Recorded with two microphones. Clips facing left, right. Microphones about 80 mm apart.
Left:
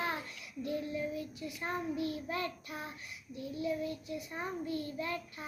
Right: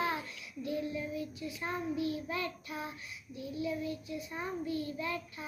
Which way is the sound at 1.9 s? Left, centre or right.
Left.